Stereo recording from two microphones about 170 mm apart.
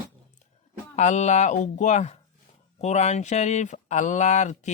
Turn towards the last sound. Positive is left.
turn(degrees=45)  # may be behind; listen again after turning